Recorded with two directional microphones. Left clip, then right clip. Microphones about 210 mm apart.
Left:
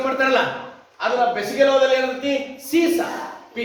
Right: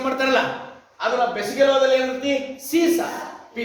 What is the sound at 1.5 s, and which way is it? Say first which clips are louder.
Speech: even; 10° right (ahead or behind).